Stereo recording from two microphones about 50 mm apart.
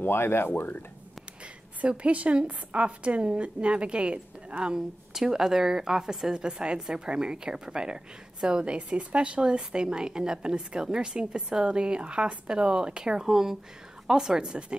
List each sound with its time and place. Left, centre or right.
0.0 s speech: left
1.8 s a woman's voice: right
4.7 s a woman's voice: centre